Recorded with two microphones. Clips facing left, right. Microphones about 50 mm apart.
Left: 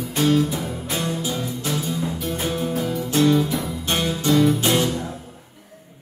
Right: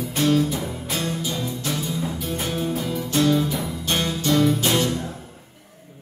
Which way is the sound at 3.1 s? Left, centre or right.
Left.